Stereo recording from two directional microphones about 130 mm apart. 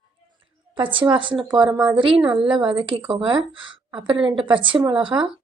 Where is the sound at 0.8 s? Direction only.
40° right (ahead or behind).